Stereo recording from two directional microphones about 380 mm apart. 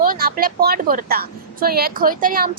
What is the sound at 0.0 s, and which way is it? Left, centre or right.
A woman's voice, right.